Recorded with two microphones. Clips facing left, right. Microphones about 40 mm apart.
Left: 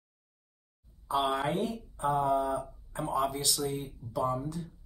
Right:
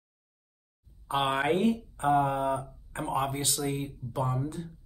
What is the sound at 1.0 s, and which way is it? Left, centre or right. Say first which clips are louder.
Speech: right 2 dB; right.